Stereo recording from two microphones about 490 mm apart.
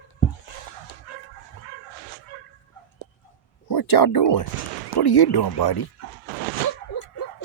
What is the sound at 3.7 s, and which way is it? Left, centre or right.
Speech, left.